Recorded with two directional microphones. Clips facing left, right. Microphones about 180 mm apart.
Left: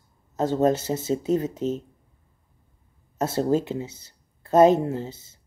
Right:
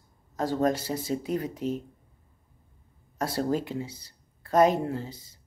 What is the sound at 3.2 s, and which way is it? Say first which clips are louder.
Speech: left 5 dB; 25° left (ahead or behind).